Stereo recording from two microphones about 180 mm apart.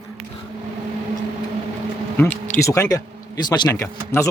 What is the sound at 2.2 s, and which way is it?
Speech, 10° left (ahead or behind).